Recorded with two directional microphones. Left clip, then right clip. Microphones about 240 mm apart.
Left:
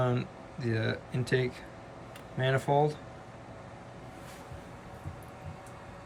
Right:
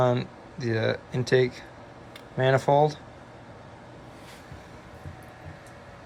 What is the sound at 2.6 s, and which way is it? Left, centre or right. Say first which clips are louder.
Speech: right 5 dB; left.